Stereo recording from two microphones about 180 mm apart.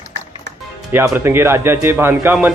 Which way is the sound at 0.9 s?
10° right (ahead or behind).